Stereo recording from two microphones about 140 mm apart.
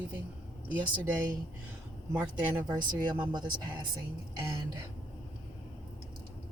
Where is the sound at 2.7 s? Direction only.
30° right (ahead or behind).